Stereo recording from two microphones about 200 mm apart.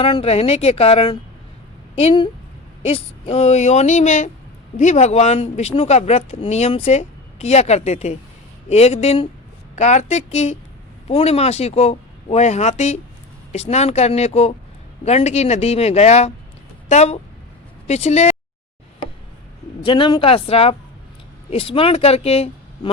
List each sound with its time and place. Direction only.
0.0 s speech: 30° left (ahead or behind)
19.8 s speech: 25° left (ahead or behind)